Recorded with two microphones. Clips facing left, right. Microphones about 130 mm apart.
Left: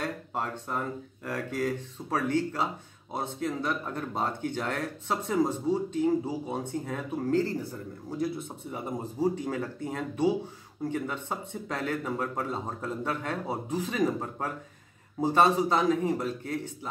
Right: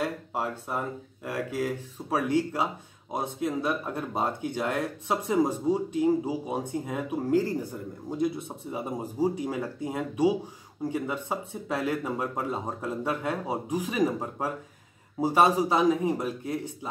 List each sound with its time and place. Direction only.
0.0 s speech: 10° right (ahead or behind)